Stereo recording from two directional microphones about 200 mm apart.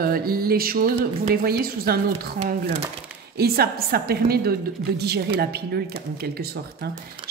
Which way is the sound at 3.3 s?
50° right (ahead or behind).